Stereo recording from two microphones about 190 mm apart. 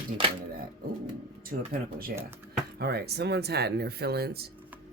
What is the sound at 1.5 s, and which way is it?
Speech, 50° right (ahead or behind).